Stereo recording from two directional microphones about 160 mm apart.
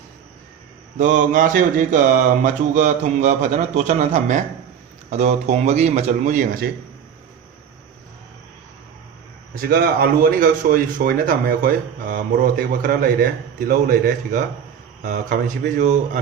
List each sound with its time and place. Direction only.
0.9 s speech: 50° right (ahead or behind)
9.6 s speech: 70° right (ahead or behind); by 16.0 s 50° right (ahead or behind)